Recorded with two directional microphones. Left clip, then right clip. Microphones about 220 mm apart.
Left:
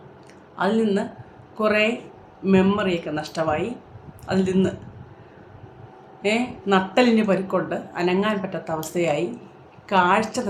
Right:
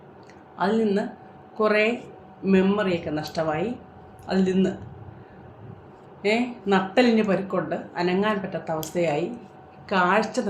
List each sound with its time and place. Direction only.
0.5 s speech: 15° left (ahead or behind)
6.2 s speech: 15° left (ahead or behind)